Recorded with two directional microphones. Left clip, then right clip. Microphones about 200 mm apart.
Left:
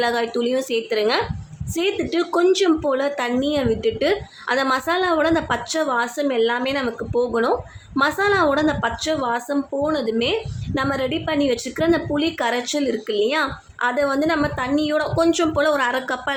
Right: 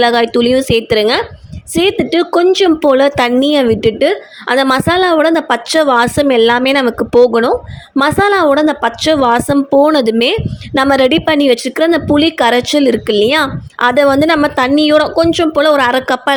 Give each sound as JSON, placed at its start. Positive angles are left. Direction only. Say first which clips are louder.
{"t": 0.0, "sound": "a woman's voice", "louder": "right 11 dB", "side_deg": -35}